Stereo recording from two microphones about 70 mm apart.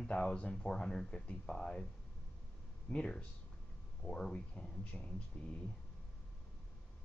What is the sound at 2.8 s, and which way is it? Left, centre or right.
Speech, centre.